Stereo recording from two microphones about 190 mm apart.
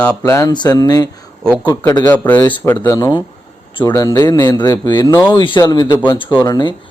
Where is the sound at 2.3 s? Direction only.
10° left (ahead or behind).